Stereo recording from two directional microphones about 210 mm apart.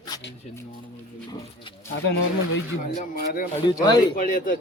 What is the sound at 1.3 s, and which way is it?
Speech, 20° left (ahead or behind).